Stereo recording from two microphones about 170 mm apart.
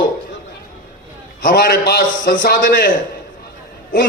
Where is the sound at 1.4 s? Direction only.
60° left (ahead or behind).